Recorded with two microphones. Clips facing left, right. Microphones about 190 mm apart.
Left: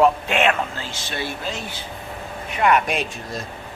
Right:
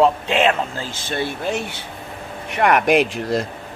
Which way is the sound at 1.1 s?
60° right (ahead or behind).